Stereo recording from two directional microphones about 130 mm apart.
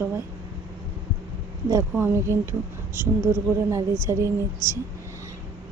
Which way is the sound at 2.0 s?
20° right (ahead or behind).